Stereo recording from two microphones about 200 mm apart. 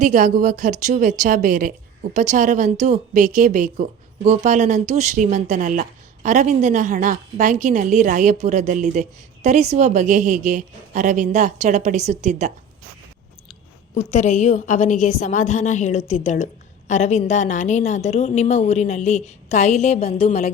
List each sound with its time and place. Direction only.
0.0 s a woman's voice: 40° right (ahead or behind)
13.9 s a woman's voice: 35° left (ahead or behind)